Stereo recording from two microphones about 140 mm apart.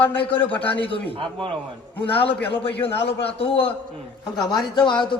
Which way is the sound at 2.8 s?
45° left (ahead or behind).